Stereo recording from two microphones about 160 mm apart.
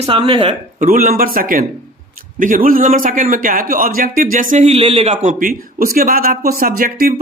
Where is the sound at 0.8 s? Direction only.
60° right (ahead or behind); by 5.3 s 40° right (ahead or behind).